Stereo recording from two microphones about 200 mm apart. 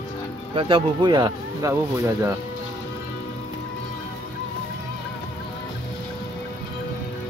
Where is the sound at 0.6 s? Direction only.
25° right (ahead or behind).